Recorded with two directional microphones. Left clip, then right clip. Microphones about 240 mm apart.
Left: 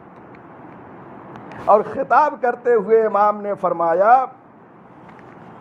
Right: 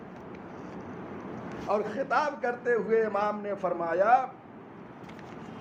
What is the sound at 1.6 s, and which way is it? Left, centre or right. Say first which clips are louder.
A man's voice: left 14 dB; left.